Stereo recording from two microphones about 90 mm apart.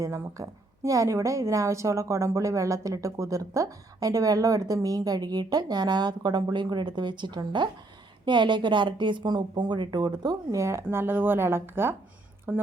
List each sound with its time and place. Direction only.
0.0 s a woman's voice: 35° right (ahead or behind); by 10.1 s 55° right (ahead or behind)
10.2 s speech: 35° right (ahead or behind)